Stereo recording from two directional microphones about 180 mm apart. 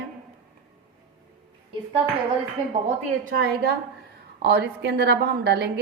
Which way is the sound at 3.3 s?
60° right (ahead or behind).